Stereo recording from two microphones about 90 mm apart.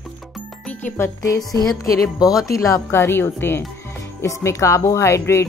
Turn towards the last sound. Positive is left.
turn(degrees=30)  # may be behind; listen again after turning